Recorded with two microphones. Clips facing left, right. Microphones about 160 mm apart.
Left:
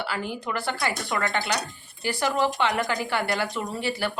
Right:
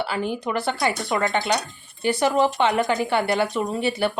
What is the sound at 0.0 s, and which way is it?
Speech, 20° right (ahead or behind).